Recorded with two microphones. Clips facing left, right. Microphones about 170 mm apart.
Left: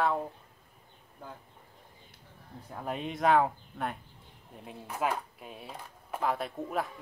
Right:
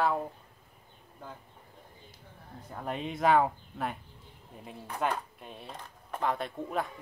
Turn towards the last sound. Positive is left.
turn(degrees=0)  # may be behind; listen again after turning